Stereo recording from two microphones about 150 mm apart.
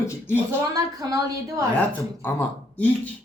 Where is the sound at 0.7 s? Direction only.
25° right (ahead or behind).